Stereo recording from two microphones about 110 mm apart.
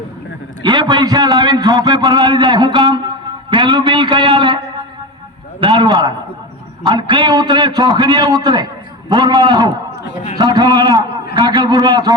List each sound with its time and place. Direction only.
0.6 s a man's voice: 45° right (ahead or behind)